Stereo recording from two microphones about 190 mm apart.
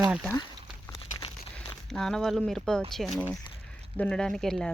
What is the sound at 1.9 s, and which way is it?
Speech, centre (ahead or behind).